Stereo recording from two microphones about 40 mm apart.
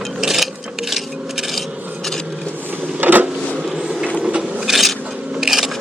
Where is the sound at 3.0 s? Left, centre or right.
Right.